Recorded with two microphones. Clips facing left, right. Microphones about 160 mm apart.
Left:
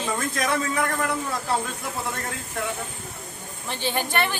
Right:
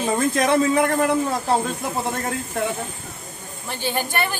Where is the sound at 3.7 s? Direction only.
5° right (ahead or behind).